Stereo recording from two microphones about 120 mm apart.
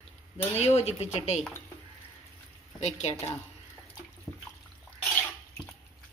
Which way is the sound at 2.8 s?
65° left (ahead or behind).